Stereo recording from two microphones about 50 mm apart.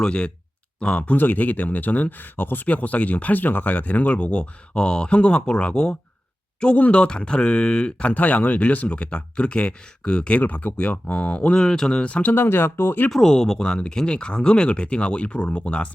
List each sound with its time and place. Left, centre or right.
0.0 s speech: centre
8.1 s speech: left
10.4 s speech: left
12.3 s speech: left
13.1 s speech: centre